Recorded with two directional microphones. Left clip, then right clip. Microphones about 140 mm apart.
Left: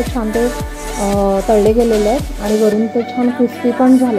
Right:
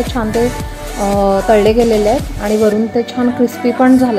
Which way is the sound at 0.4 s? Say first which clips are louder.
Even; centre (ahead or behind).